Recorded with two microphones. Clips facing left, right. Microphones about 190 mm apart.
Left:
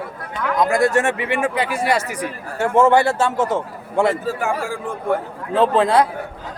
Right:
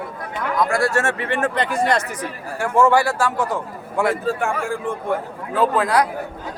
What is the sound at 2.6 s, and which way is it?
Speech, 20° left (ahead or behind).